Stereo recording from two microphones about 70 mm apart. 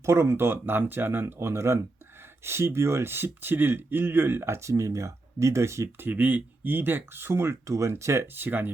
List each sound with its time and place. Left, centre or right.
0.0 s speech: right
6.1 s speech: right
7.7 s speech: right
8.4 s speech: right